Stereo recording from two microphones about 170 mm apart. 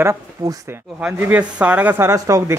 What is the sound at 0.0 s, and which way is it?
Speech, 15° right (ahead or behind).